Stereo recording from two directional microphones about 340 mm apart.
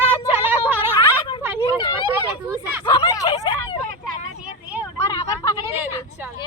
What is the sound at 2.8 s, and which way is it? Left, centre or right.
Hubbub, centre.